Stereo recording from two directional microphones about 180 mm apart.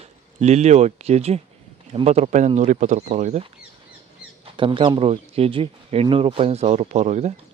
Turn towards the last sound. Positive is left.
turn(degrees=-40)  # may be behind; listen again after turning